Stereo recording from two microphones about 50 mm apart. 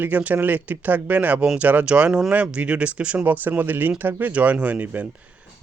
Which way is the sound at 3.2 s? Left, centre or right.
Right.